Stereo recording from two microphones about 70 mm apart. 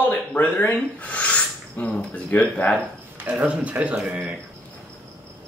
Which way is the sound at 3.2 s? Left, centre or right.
Right.